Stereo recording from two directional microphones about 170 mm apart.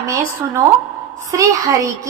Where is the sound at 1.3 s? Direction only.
20° right (ahead or behind).